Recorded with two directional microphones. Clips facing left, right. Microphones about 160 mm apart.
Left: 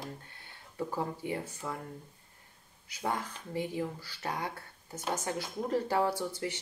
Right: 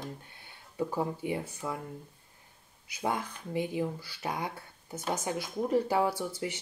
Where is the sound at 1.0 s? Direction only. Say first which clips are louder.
Right 2 dB; 10° right (ahead or behind).